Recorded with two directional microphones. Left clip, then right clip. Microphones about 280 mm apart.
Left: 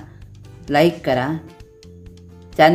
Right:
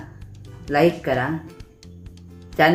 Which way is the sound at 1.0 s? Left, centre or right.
Left.